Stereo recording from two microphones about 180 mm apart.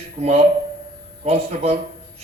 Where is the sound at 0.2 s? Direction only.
35° right (ahead or behind).